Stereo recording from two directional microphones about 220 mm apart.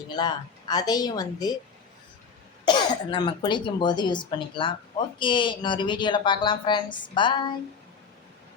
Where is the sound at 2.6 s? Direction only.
20° left (ahead or behind).